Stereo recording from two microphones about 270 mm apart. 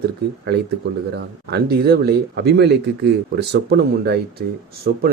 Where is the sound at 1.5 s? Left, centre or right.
Right.